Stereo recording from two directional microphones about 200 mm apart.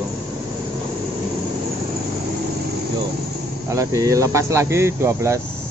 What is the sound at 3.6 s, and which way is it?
Speech, 15° right (ahead or behind).